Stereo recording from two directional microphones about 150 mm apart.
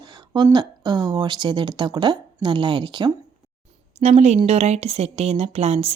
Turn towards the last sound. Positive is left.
turn(degrees=-45)  # may be behind; listen again after turning